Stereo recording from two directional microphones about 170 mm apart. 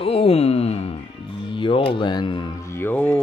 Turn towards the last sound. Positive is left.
turn(degrees=10)  # may be behind; listen again after turning